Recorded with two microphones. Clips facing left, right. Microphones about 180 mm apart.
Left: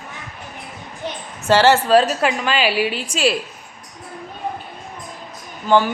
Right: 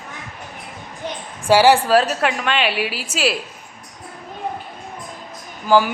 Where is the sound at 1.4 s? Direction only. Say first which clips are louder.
Right 1 dB; 10° right (ahead or behind).